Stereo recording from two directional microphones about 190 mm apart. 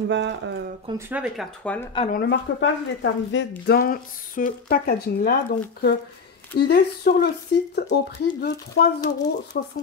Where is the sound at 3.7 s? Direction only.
50° left (ahead or behind).